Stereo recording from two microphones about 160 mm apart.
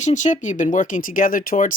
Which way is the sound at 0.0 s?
50° left (ahead or behind).